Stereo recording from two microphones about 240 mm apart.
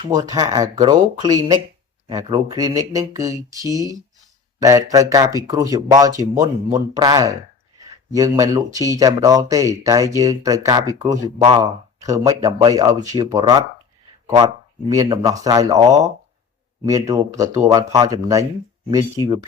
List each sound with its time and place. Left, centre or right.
0.3 s speech: centre
14.8 s speech: centre